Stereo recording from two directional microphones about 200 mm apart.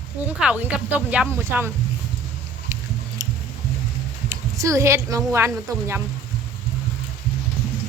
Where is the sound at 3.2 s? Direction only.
15° right (ahead or behind).